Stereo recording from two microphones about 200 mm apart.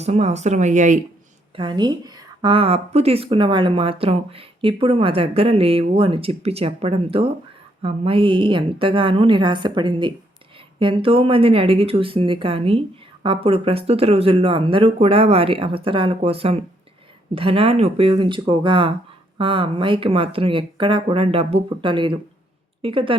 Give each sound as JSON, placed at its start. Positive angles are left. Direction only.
{"t": 0.0, "sound": "speech", "side_deg": -30}
{"t": 1.5, "sound": "a woman's voice", "side_deg": -25}